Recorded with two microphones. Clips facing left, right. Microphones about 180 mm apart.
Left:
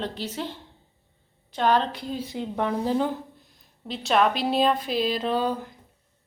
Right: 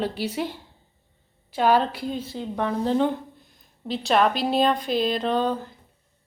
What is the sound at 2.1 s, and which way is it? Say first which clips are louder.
Speech: left 3 dB; 15° left (ahead or behind).